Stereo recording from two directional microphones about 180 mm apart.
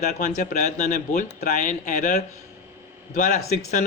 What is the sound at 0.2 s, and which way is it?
Speech, 45° left (ahead or behind).